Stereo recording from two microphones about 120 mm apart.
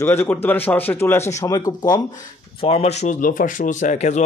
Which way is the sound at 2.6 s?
60° left (ahead or behind).